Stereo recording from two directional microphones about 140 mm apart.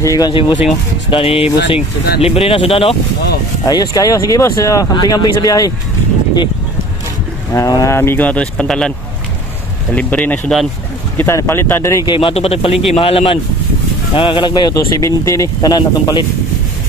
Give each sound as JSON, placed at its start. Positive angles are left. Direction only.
{"t": 0.0, "sound": "speech", "side_deg": 25}
{"t": 0.3, "sound": "speech", "side_deg": 35}
{"t": 3.6, "sound": "speech", "side_deg": 25}
{"t": 7.5, "sound": "speech", "side_deg": 25}
{"t": 9.9, "sound": "speech", "side_deg": 10}
{"t": 12.1, "sound": "speech", "side_deg": 40}